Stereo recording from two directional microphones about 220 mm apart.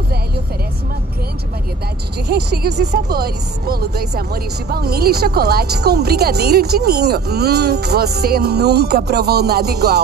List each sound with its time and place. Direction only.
2.2 s speech: 50° right (ahead or behind)